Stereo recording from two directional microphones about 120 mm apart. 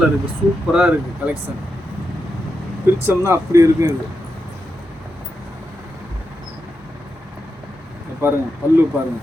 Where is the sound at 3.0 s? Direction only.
25° right (ahead or behind).